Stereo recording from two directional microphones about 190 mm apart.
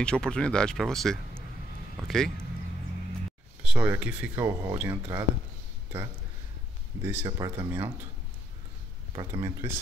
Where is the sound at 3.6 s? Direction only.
10° right (ahead or behind).